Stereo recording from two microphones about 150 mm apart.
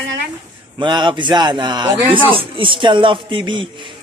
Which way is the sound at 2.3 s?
35° right (ahead or behind).